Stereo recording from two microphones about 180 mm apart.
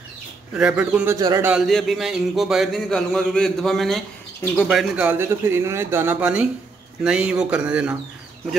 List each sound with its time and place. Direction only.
0.6 s speech: 5° right (ahead or behind)
1.1 s speech: 20° right (ahead or behind)
1.5 s speech: centre (ahead or behind)